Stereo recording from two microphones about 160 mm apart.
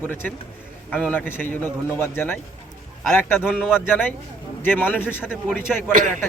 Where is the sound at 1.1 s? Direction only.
10° left (ahead or behind).